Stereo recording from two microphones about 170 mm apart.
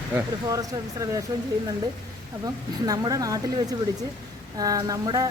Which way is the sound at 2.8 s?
20° right (ahead or behind).